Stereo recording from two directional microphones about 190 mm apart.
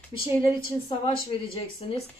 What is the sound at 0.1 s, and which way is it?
Speech, 25° left (ahead or behind).